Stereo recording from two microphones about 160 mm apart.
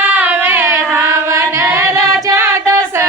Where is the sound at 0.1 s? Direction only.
10° right (ahead or behind).